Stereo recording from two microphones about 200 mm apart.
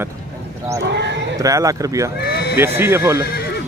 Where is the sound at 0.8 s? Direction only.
60° right (ahead or behind).